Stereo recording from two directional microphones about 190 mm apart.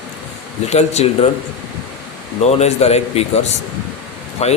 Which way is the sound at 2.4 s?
35° left (ahead or behind).